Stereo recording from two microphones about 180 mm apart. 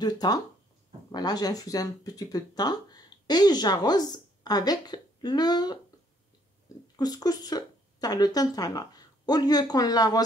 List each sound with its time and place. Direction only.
0.0 s speech: 20° left (ahead or behind)
7.0 s speech: 20° left (ahead or behind)